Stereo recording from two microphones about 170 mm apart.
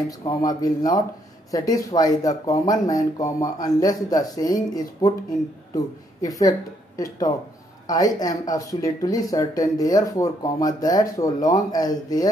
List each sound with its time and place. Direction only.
0.3 s speech: 20° left (ahead or behind)
6.2 s speech: 20° left (ahead or behind)
7.8 s a sound: 20° left (ahead or behind)
8.2 s speech: 20° left (ahead or behind)